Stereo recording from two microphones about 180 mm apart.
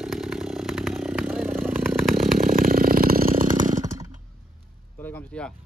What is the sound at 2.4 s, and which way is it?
Chainsaw, 50° right (ahead or behind).